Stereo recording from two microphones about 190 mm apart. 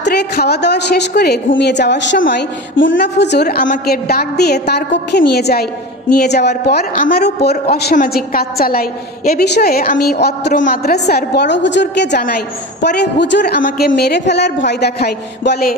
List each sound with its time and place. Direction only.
0.0 s a woman's voice: 60° left (ahead or behind)
7.9 s a woman's voice: 45° left (ahead or behind); by 13.6 s 65° left (ahead or behind)
13.6 s a woman's voice: 45° left (ahead or behind)